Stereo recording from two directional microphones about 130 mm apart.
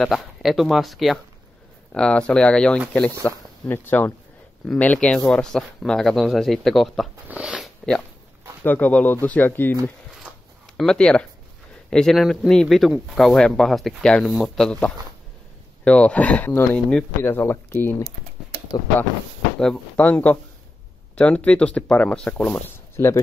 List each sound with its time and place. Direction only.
0.0 s speech: centre (ahead or behind)
7.2 s speech: 10° right (ahead or behind)
8.6 s speech: 10° left (ahead or behind)
10.8 s speech: 5° left (ahead or behind)
19.6 s speech: 10° left (ahead or behind)